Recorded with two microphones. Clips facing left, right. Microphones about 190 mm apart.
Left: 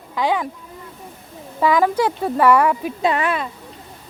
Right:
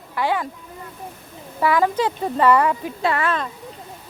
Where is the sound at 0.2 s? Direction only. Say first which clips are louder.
Left 2 dB; 15° left (ahead or behind).